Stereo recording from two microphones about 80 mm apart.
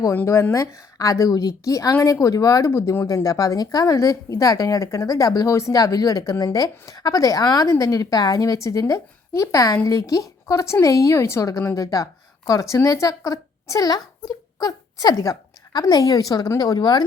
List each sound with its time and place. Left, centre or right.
0.1 s a woman's voice: left